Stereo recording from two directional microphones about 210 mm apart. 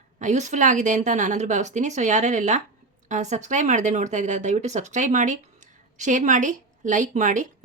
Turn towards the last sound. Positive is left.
turn(degrees=-35)  # may be behind; listen again after turning